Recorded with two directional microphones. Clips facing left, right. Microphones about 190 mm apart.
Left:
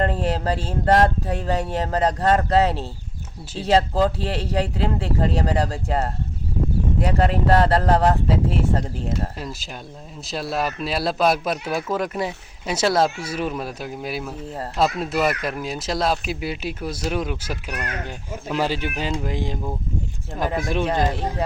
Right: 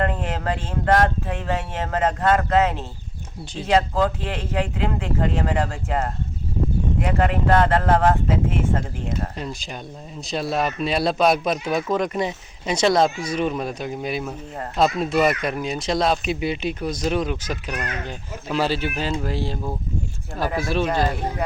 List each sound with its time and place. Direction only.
0.0 s speech: 35° left (ahead or behind)
9.4 s speech: 5° left (ahead or behind); by 21.4 s 20° left (ahead or behind)